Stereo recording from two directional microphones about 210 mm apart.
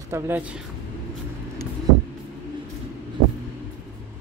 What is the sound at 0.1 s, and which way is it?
Speech, 10° right (ahead or behind).